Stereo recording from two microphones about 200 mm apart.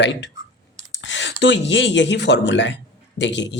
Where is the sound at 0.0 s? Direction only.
60° left (ahead or behind).